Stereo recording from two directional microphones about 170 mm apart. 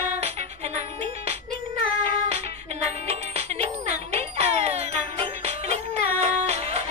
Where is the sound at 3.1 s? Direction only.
35° right (ahead or behind).